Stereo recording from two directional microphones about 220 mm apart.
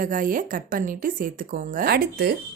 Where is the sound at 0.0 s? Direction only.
40° right (ahead or behind).